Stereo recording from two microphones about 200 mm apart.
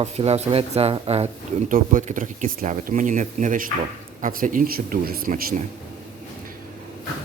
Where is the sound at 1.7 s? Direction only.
40° right (ahead or behind).